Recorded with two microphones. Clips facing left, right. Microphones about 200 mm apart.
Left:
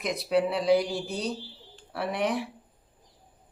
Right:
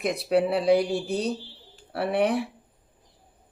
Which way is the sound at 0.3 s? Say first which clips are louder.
Right 2 dB; 60° right (ahead or behind).